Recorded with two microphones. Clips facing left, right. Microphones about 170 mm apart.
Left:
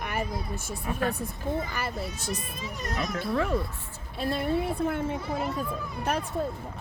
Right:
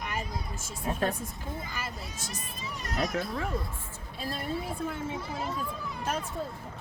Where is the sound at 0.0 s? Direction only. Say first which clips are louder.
Left 4 dB; 65° left (ahead or behind).